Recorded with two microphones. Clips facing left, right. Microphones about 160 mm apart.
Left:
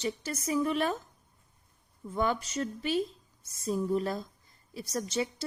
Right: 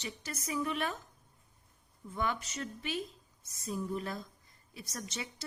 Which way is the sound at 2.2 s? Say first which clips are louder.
Left 6 dB; 35° left (ahead or behind).